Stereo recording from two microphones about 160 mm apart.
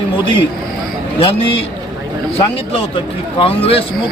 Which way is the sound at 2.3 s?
35° left (ahead or behind).